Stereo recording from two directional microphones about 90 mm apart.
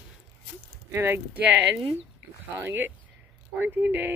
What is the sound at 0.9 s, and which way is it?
Speech, 25° right (ahead or behind).